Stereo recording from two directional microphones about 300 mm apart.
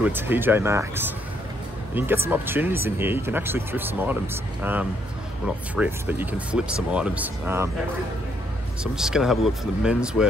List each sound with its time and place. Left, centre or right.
0.0 s speech: centre
8.8 s speech: centre